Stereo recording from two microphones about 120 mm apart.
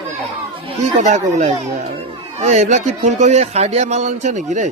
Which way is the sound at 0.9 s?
90° right.